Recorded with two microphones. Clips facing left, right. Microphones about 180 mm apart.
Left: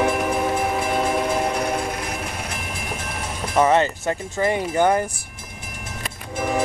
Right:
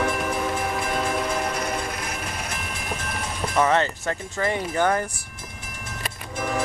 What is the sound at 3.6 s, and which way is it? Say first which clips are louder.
Speech: left 4 dB; 15° left (ahead or behind).